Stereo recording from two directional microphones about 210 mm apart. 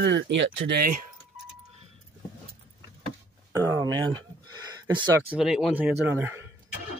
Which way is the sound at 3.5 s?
20° right (ahead or behind).